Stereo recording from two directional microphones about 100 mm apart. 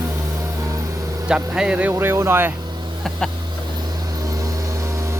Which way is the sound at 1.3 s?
10° right (ahead or behind).